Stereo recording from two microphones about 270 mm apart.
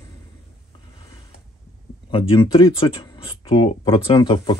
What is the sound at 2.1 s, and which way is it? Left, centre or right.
Speech, centre.